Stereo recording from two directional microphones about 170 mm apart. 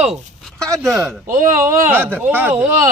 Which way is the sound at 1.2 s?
50° right (ahead or behind).